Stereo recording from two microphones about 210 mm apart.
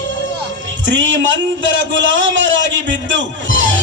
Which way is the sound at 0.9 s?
60° right (ahead or behind).